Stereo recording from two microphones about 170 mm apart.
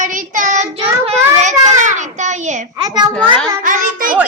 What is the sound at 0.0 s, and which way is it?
Child singing, 50° right (ahead or behind).